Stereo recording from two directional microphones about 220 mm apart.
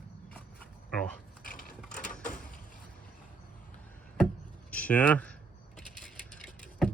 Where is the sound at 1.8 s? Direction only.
5° left (ahead or behind).